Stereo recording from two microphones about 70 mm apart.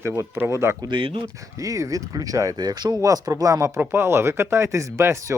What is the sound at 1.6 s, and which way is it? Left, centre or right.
Speech, right.